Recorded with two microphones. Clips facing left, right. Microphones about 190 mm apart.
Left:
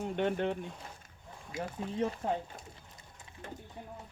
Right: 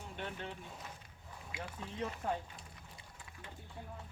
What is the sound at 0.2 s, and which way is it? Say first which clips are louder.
Speech: left 13 dB; 65° left (ahead or behind).